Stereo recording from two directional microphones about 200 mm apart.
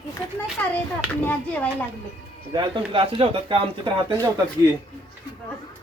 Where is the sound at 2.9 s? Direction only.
25° right (ahead or behind).